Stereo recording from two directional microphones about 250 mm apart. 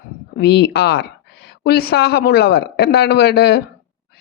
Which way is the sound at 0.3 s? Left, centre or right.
Left.